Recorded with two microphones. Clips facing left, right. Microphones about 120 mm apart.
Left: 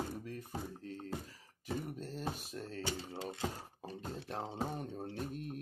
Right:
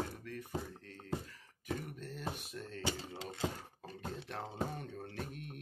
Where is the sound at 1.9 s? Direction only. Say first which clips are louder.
Left 2 dB; 35° left (ahead or behind).